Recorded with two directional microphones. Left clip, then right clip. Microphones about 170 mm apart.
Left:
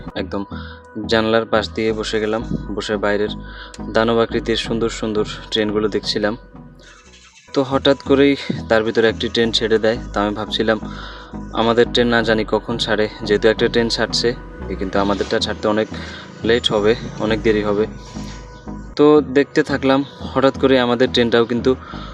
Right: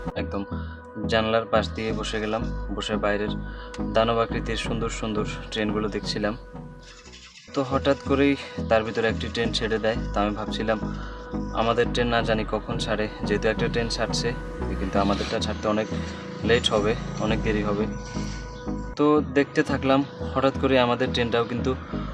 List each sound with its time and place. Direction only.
0.1 s speech: 40° left (ahead or behind)
7.5 s speech: 35° left (ahead or behind)
18.9 s speech: 35° left (ahead or behind)